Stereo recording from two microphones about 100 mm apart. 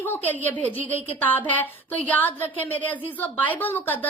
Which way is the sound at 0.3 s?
15° left (ahead or behind).